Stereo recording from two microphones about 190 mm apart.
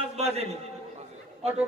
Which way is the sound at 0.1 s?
35° right (ahead or behind).